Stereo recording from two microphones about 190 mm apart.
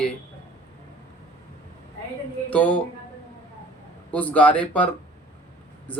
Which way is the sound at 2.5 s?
10° left (ahead or behind).